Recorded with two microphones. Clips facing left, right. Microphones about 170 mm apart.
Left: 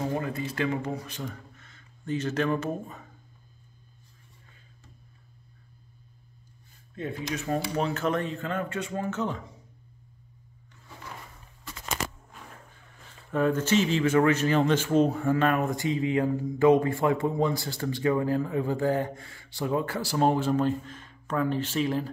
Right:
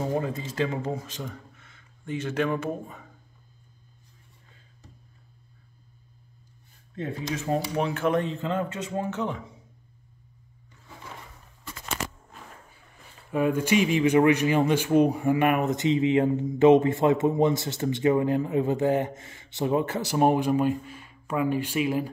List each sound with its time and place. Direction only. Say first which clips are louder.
0.2 s speech: right 1 dB; 25° right (ahead or behind)
1.6 s speech: left 3 dB; 10° right (ahead or behind)
7.4 s speech: right 2 dB; 15° right (ahead or behind)
13.3 s speech: right 1 dB; 10° right (ahead or behind)